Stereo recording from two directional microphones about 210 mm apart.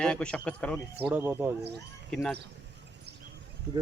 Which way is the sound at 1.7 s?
5° left (ahead or behind).